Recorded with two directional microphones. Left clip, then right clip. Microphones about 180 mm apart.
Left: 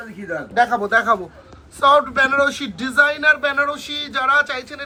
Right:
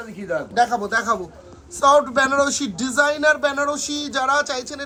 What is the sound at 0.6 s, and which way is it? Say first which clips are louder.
A man's voice: left 4 dB; 5° right (ahead or behind).